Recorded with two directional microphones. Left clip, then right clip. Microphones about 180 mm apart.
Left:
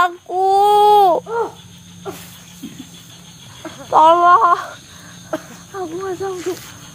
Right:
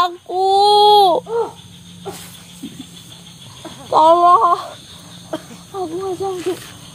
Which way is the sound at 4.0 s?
35° right (ahead or behind).